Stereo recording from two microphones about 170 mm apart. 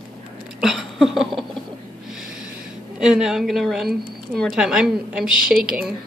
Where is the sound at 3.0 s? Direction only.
5° right (ahead or behind).